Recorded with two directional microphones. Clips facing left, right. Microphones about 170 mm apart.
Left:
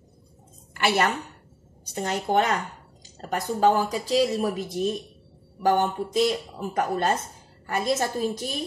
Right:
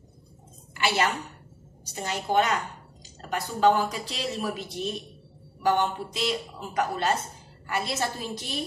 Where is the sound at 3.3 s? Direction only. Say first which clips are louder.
Left 1 dB; 40° left (ahead or behind).